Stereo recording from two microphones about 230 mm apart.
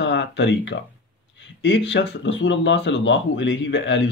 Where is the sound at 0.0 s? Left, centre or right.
Left.